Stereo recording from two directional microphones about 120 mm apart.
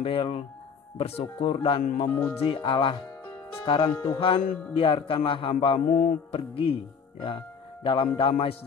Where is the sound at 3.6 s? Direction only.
35° left (ahead or behind).